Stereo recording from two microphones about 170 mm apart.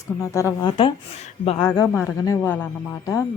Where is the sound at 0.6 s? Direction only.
30° left (ahead or behind).